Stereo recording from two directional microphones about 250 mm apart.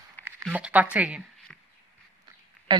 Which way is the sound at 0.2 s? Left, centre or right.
Centre.